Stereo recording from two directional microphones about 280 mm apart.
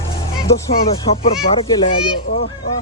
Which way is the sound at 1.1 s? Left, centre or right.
Centre.